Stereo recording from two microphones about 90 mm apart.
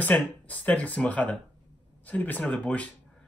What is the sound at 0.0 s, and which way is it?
Speech, 15° left (ahead or behind).